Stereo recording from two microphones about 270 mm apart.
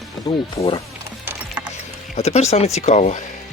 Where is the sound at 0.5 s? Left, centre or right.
Left.